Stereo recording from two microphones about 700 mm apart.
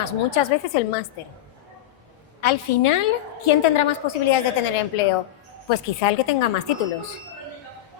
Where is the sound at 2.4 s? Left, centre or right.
Left.